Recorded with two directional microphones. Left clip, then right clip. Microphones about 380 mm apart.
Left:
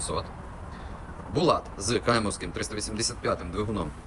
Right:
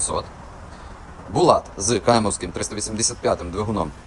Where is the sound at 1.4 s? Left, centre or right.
Centre.